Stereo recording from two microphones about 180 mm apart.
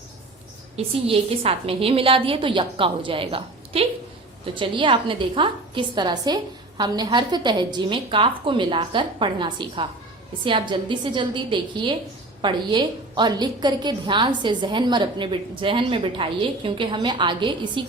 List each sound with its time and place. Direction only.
0.8 s a woman's voice: 30° right (ahead or behind)